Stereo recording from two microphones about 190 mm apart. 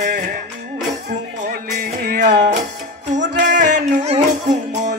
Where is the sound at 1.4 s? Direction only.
50° right (ahead or behind).